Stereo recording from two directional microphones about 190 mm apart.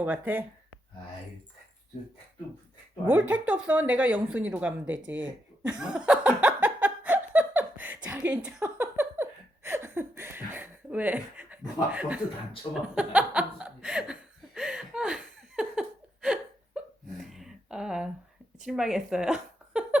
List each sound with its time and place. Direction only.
0.0 s speech: 10° right (ahead or behind)
3.1 s speech: 10° right (ahead or behind)
5.8 s giggle: 5° right (ahead or behind)
11.9 s speech: 5° right (ahead or behind)
12.9 s chuckle: 5° right (ahead or behind)
18.6 s a woman's voice: 5° right (ahead or behind)